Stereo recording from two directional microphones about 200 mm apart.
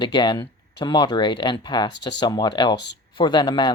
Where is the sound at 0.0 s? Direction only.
20° left (ahead or behind).